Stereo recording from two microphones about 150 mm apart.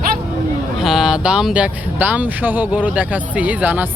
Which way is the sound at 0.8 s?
5° right (ahead or behind).